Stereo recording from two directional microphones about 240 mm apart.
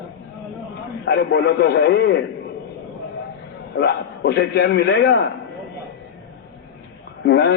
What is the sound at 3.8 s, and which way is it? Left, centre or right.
A man's voice, left.